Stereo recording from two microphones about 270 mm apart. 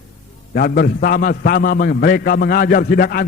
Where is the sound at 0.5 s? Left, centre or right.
Left.